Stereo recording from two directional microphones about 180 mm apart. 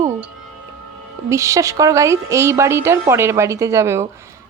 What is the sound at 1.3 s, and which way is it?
Speech, 15° right (ahead or behind).